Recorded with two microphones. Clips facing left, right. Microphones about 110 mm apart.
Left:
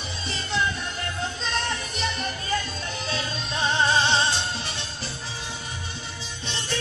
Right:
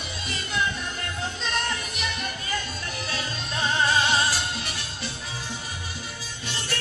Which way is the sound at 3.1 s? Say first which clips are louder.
Left 3 dB; 30° left (ahead or behind).